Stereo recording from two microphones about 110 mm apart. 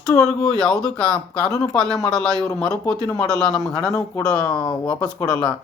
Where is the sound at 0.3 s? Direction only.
5° left (ahead or behind).